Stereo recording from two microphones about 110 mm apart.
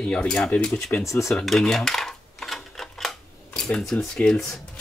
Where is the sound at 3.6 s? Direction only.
5° left (ahead or behind).